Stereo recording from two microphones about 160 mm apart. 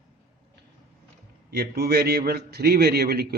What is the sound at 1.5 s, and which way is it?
A man's voice, 75° right (ahead or behind).